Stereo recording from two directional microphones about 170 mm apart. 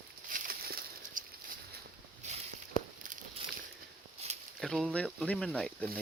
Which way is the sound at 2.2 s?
45° right (ahead or behind).